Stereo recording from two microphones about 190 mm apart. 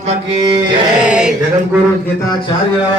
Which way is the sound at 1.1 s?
5° right (ahead or behind).